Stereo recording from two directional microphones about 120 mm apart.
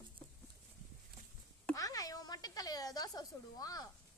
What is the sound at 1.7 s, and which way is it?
Speech, 30° left (ahead or behind).